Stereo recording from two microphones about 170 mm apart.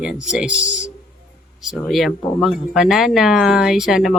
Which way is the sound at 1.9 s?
Centre (ahead or behind).